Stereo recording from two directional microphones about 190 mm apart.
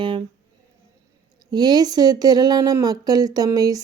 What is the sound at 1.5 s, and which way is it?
A woman's voice, 20° right (ahead or behind).